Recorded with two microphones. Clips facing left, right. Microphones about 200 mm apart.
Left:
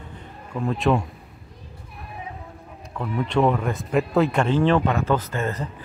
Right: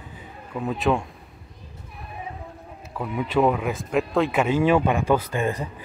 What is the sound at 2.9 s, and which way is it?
Speech, 5° right (ahead or behind).